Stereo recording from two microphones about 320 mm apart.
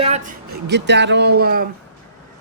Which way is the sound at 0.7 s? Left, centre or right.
Right.